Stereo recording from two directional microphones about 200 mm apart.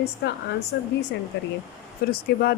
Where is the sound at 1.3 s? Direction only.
60° left (ahead or behind).